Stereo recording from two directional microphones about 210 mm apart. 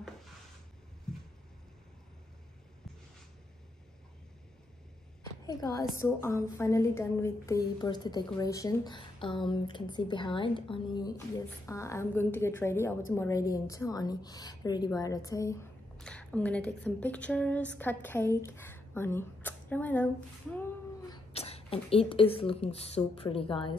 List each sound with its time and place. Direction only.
5.2 s a woman's voice: 15° left (ahead or behind)
16.0 s a woman's voice: 5° left (ahead or behind)
21.1 s speech: 30° left (ahead or behind)